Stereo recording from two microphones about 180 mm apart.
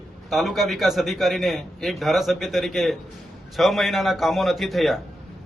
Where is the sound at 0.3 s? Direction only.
Centre (ahead or behind).